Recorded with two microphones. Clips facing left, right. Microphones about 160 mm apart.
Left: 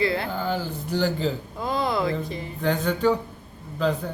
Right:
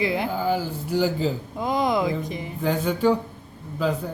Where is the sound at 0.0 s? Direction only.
15° right (ahead or behind).